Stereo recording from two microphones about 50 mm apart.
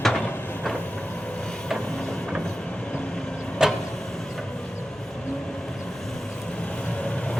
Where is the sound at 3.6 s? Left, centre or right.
Centre.